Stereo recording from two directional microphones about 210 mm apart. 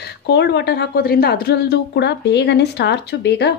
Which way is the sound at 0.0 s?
50° left (ahead or behind).